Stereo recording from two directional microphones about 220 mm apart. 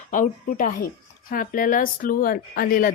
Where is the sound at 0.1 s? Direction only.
40° left (ahead or behind).